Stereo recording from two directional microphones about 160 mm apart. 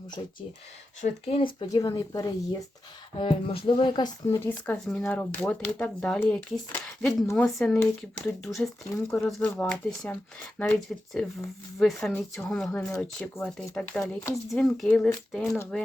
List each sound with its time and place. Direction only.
1.0 s speech: 35° left (ahead or behind)
3.2 s speech: 35° left (ahead or behind)
4.4 s speech: 10° left (ahead or behind)